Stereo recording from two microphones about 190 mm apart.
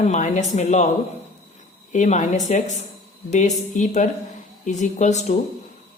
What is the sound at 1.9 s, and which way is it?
A woman's voice, 40° left (ahead or behind).